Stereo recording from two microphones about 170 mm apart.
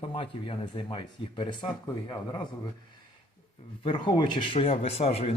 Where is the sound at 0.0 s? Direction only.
35° left (ahead or behind).